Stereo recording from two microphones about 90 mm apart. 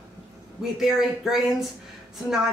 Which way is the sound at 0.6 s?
5° right (ahead or behind).